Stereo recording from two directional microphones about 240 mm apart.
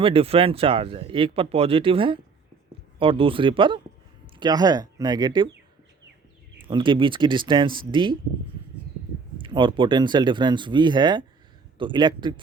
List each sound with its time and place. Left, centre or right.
0.0 s speech: right
6.7 s speech: centre
9.4 s speech: centre